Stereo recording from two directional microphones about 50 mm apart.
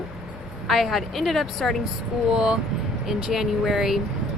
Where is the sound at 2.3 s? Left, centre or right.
Centre.